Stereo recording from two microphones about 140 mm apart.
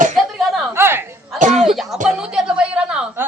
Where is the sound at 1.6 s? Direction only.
Centre (ahead or behind).